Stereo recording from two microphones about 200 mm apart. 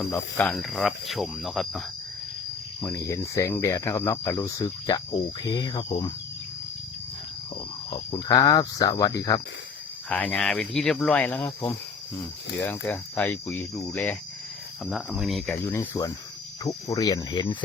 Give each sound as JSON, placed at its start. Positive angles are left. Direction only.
{"t": 0.0, "sound": "speech", "side_deg": 5}
{"t": 2.8, "sound": "speech", "side_deg": 15}
{"t": 7.9, "sound": "speech", "side_deg": 25}
{"t": 10.1, "sound": "speech", "side_deg": 5}
{"t": 12.8, "sound": "speech", "side_deg": 10}
{"t": 15.7, "sound": "speech", "side_deg": 15}